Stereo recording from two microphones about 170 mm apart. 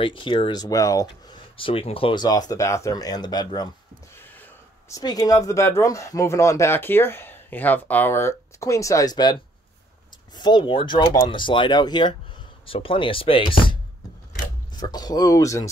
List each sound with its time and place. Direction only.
0.0 s speech: 30° left (ahead or behind)